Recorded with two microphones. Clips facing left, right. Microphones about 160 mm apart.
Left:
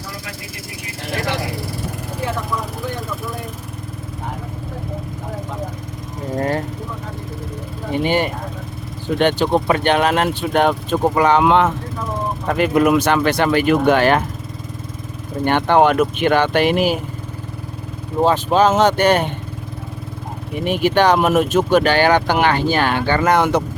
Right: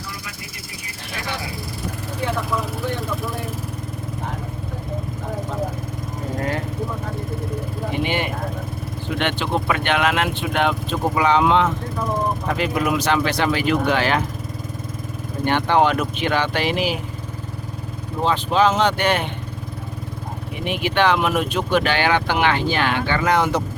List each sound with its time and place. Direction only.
1.3 s vehicle: 75° left (ahead or behind)
2.8 s vehicle: centre (ahead or behind)
8.0 s vehicle: 40° left (ahead or behind)
9.1 s speech: 40° left (ahead or behind)
15.4 s speech: 50° left (ahead or behind)
18.3 s speech: 45° left (ahead or behind)
20.7 s speech: 40° left (ahead or behind); by 23.6 s 60° left (ahead or behind)